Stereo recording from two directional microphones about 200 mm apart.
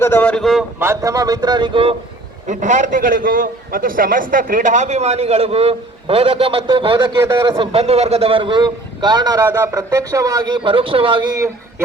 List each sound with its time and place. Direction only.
0.0 s speech: 10° left (ahead or behind)
0.8 s a man's voice: 15° right (ahead or behind)
2.5 s a man's voice: 40° right (ahead or behind); by 7.7 s 20° right (ahead or behind)
7.7 s a man's voice: 30° right (ahead or behind)